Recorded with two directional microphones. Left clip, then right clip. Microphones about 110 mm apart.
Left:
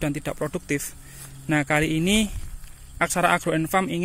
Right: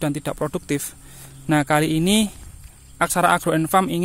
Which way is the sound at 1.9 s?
60° right (ahead or behind).